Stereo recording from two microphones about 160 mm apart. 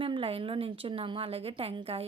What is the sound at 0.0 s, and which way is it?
A woman's voice, 35° right (ahead or behind).